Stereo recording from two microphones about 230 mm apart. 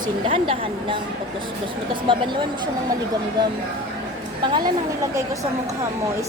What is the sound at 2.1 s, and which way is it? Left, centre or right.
Speech, right.